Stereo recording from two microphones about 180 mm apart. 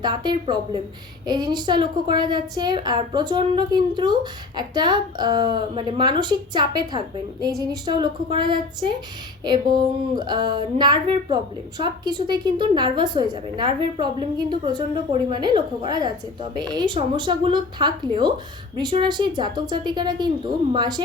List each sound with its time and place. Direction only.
0.0 s a woman's voice: 25° right (ahead or behind)